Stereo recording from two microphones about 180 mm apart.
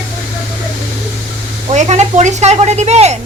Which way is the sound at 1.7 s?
40° right (ahead or behind).